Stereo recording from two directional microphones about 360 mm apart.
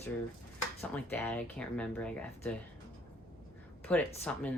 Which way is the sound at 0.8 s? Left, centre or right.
Centre.